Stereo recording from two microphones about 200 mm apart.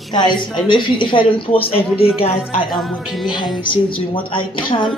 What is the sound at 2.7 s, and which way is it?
Speech, centre (ahead or behind).